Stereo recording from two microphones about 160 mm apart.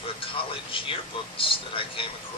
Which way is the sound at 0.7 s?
35° left (ahead or behind).